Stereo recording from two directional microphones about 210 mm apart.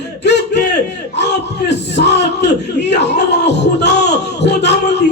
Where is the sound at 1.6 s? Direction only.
55° left (ahead or behind).